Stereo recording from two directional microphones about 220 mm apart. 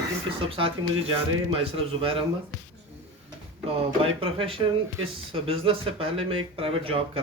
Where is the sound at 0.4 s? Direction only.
25° right (ahead or behind).